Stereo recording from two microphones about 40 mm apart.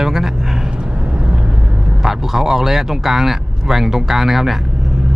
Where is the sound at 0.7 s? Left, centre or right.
Right.